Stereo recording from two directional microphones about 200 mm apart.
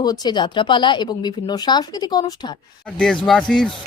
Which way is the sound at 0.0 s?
20° left (ahead or behind).